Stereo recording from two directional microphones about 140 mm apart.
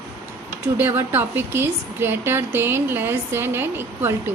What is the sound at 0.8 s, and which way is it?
Speech, 15° right (ahead or behind).